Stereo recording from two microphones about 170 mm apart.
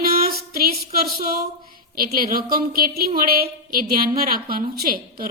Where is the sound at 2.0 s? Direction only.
60° right (ahead or behind).